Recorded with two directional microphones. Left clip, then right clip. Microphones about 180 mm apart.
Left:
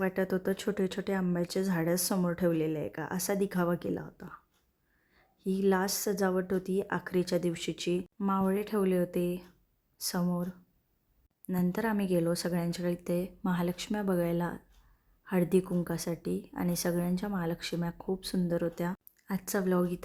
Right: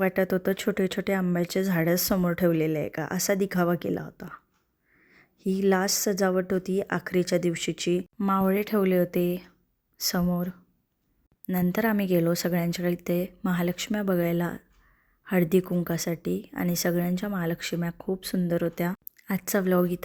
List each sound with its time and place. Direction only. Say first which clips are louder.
0.0 s a woman's voice: right 6 dB; 15° right (ahead or behind)